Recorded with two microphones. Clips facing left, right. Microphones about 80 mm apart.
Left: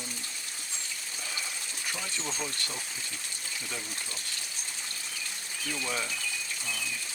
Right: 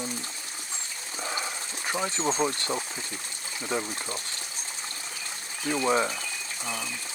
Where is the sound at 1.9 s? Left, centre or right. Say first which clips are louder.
Right 10 dB; right.